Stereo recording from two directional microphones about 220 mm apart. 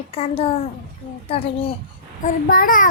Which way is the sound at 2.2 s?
40° left (ahead or behind).